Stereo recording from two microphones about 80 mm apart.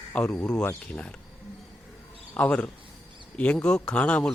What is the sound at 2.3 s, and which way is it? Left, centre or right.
A man's voice, centre.